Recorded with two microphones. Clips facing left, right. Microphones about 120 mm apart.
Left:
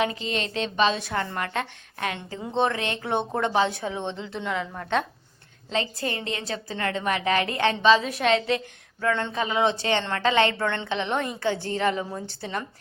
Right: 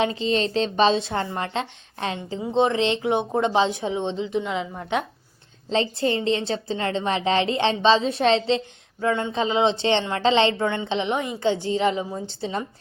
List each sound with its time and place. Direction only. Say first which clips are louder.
0.0 s a woman's voice: right 5 dB; 30° right (ahead or behind)
5.6 s a woman's voice: right 6 dB; 30° right (ahead or behind)